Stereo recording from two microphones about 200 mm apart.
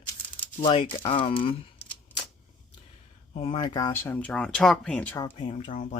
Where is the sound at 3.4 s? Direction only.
25° left (ahead or behind).